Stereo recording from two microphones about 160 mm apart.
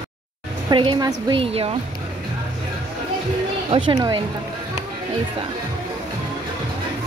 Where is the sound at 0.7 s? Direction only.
30° right (ahead or behind).